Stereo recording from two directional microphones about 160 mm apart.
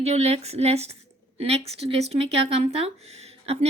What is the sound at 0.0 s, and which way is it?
A woman's voice, 40° right (ahead or behind).